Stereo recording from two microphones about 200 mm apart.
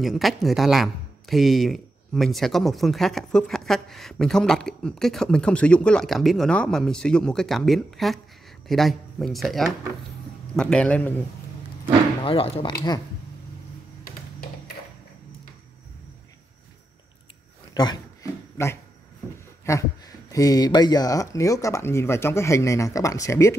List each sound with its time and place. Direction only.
0.0 s speech: centre (ahead or behind)
12.3 s speech: 30° left (ahead or behind)
17.7 s dog: 20° left (ahead or behind)
19.6 s speech: 15° left (ahead or behind)